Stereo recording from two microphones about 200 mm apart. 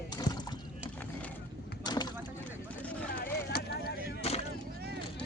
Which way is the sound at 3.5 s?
55° left (ahead or behind).